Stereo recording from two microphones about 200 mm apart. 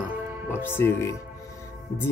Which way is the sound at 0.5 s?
10° left (ahead or behind).